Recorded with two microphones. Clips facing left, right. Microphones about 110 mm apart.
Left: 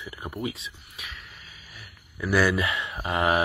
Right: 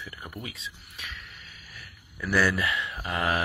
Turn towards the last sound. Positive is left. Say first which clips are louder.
# left 4 dB
turn(degrees=20)  # may be behind; listen again after turning